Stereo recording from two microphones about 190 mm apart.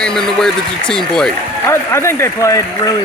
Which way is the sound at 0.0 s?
5° left (ahead or behind).